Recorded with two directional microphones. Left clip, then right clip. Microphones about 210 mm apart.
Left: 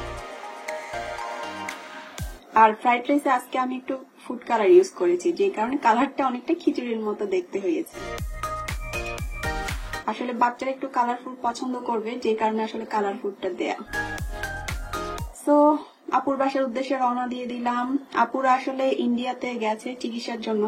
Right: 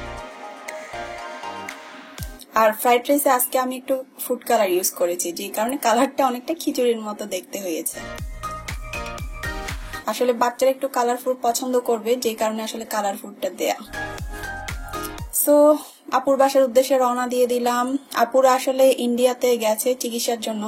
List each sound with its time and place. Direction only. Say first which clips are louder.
0.7 s music: left 1 dB; centre (ahead or behind)
2.5 s speech: right 1 dB; 45° right (ahead or behind)
8.0 s music: even; centre (ahead or behind)
10.0 s speech: right 4 dB; 45° right (ahead or behind)
13.9 s music: left 1 dB; centre (ahead or behind)
16.1 s speech: right 5 dB; 45° right (ahead or behind)